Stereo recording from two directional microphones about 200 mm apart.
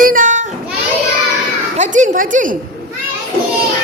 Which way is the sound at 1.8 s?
40° right (ahead or behind).